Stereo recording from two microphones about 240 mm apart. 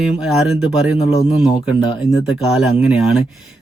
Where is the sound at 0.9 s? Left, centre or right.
Left.